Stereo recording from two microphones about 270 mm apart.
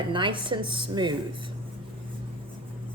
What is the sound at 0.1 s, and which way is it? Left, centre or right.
A woman's voice, centre.